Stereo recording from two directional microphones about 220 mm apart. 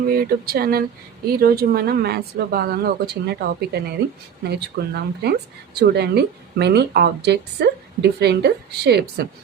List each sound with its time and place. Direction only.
0.1 s a woman's voice: 45° right (ahead or behind)